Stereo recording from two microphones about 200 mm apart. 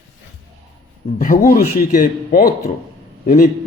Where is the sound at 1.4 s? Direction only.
45° left (ahead or behind).